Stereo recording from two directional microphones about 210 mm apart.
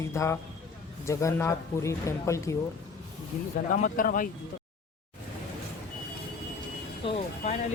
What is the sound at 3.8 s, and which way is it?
Speech, 40° left (ahead or behind).